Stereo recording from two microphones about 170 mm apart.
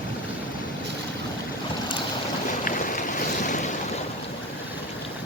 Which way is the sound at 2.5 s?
50° left (ahead or behind).